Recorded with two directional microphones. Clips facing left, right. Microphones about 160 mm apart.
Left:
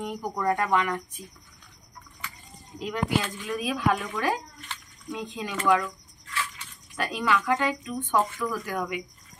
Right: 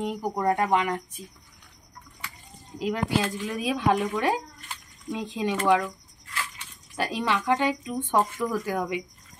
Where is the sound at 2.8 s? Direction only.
30° right (ahead or behind).